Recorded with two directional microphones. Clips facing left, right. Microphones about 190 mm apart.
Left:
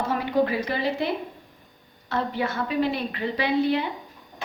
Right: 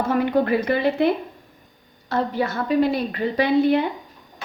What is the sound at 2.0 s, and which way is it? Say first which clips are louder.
A woman's voice: right 4 dB; 40° right (ahead or behind).